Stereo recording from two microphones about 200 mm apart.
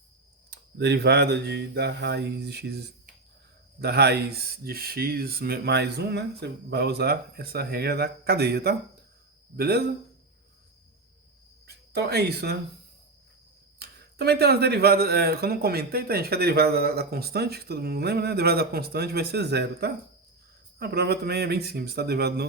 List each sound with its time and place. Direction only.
0.5 s speech: 55° right (ahead or behind)
11.6 s speech: 55° right (ahead or behind)
13.7 s speech: 55° right (ahead or behind)